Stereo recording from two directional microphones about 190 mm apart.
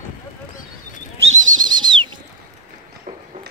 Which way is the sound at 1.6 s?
25° right (ahead or behind).